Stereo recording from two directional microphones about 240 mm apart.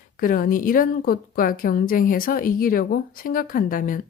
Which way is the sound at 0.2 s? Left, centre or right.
Left.